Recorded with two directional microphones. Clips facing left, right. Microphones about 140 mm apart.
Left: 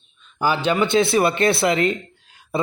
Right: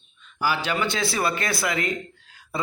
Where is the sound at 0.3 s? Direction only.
20° left (ahead or behind).